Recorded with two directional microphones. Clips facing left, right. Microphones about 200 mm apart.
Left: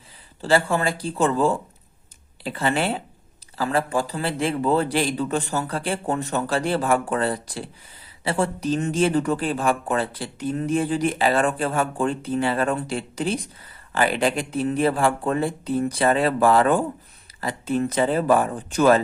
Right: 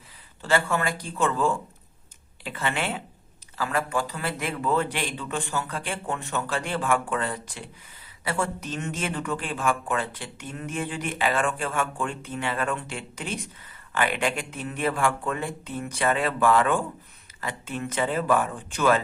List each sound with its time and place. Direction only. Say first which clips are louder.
0.4 s speech: left 4 dB; 30° left (ahead or behind)